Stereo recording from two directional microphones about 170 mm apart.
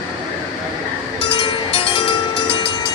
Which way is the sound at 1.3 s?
30° left (ahead or behind).